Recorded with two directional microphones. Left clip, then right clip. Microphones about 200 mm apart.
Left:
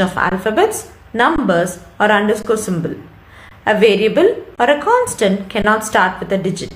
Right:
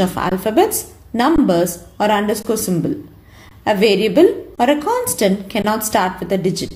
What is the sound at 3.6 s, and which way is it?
A woman's voice, 45° right (ahead or behind).